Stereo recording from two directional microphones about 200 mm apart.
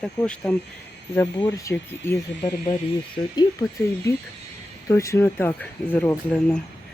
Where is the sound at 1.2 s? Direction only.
20° left (ahead or behind).